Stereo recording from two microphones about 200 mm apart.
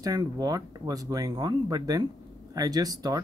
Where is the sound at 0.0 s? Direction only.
20° right (ahead or behind).